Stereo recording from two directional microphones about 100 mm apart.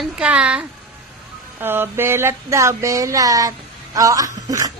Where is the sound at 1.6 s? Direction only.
20° right (ahead or behind).